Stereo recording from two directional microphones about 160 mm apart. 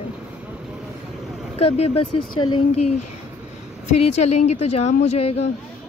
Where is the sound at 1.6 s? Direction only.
40° left (ahead or behind).